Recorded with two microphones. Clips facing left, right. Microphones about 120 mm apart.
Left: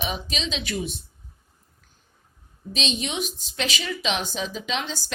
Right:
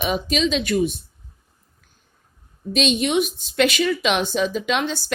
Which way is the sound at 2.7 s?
55° right (ahead or behind).